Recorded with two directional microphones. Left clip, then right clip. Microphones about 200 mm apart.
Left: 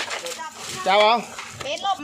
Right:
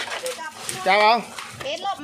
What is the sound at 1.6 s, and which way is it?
Children playing, 20° left (ahead or behind).